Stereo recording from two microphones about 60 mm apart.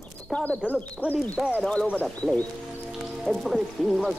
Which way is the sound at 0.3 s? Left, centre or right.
Left.